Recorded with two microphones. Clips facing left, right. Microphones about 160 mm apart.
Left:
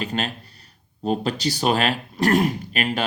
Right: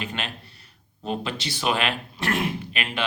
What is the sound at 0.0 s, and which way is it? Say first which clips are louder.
Speech: left 6 dB; 35° left (ahead or behind).